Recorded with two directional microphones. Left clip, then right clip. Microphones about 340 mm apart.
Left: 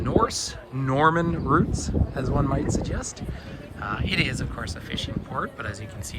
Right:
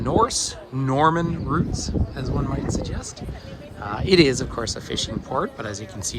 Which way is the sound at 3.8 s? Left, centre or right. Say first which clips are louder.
Right 8 dB; centre.